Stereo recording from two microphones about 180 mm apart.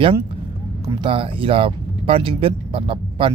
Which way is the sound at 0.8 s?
30° right (ahead or behind).